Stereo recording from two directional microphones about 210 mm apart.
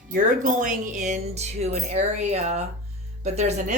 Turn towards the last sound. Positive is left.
turn(degrees=-30)  # may be behind; listen again after turning